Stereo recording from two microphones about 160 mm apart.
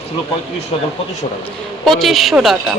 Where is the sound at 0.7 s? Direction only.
35° left (ahead or behind).